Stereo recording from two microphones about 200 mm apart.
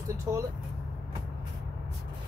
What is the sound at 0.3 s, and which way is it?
Speech, 20° right (ahead or behind).